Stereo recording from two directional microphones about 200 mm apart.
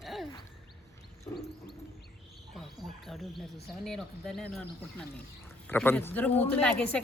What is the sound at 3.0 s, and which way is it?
A woman's voice, centre (ahead or behind).